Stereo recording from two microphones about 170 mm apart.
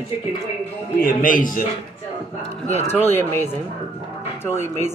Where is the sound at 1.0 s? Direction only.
55° left (ahead or behind).